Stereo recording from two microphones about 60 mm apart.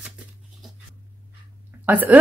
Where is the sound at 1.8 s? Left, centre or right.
Right.